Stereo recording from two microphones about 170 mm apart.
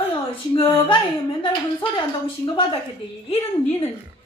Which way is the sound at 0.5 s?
30° left (ahead or behind).